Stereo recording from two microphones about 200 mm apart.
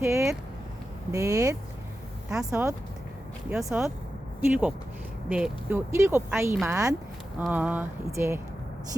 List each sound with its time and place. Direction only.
0.0 s speech: 15° right (ahead or behind)
2.3 s speech: 5° right (ahead or behind)